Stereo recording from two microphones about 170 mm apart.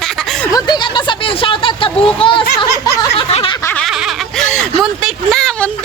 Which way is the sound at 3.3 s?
35° left (ahead or behind).